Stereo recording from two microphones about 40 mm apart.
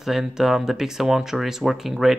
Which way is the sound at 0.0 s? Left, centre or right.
Centre.